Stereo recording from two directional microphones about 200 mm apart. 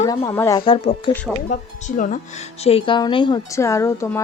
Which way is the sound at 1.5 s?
40° left (ahead or behind).